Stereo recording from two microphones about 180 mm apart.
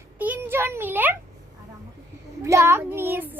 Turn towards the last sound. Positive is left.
turn(degrees=-10)  # may be behind; listen again after turning